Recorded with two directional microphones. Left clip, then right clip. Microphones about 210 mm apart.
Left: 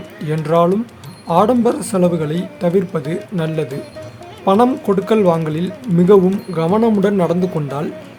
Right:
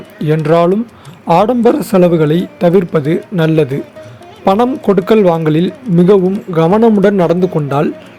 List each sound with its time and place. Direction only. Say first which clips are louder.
0.2 s speech: right 5 dB; 20° right (ahead or behind)